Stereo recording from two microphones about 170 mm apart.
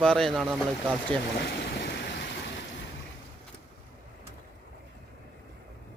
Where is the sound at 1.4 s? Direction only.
85° left.